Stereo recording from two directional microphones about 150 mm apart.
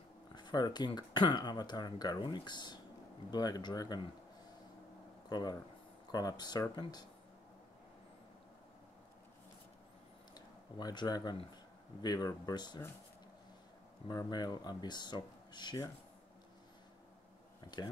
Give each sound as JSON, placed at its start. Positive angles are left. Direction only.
{"t": 0.3, "sound": "speech", "side_deg": 30}
{"t": 5.3, "sound": "speech", "side_deg": 25}
{"t": 10.3, "sound": "speech", "side_deg": 25}
{"t": 14.0, "sound": "speech", "side_deg": 25}